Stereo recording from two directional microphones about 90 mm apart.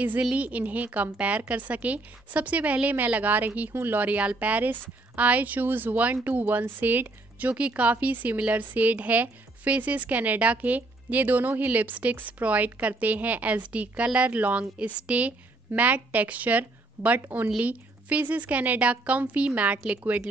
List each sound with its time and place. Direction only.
0.2 s a woman's voice: 15° right (ahead or behind)